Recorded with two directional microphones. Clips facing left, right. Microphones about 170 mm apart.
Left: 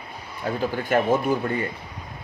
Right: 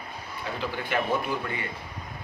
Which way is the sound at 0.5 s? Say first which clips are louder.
Left 7 dB; 45° left (ahead or behind).